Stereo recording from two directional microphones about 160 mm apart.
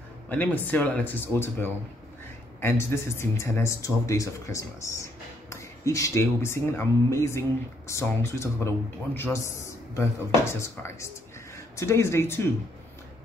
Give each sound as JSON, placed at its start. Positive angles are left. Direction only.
{"t": 0.3, "sound": "speech", "side_deg": 10}